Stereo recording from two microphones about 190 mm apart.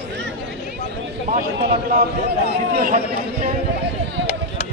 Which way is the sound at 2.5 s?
55° right (ahead or behind).